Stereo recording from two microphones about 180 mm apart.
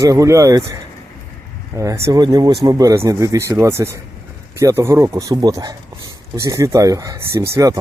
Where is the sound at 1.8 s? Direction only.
15° right (ahead or behind).